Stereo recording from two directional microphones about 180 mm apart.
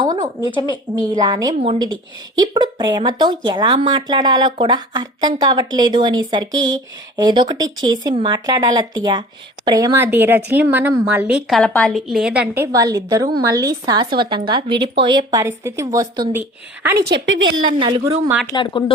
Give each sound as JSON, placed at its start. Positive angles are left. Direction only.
{"t": 0.0, "sound": "a sound", "side_deg": -20}
{"t": 0.4, "sound": "speech", "side_deg": 25}
{"t": 0.9, "sound": "speech", "side_deg": -20}
{"t": 12.6, "sound": "speech", "side_deg": -20}
{"t": 17.0, "sound": "a woman's voice", "side_deg": -70}
{"t": 17.7, "sound": "speech", "side_deg": -30}
{"t": 18.0, "sound": "speech", "side_deg": -15}
{"t": 18.5, "sound": "speech", "side_deg": 25}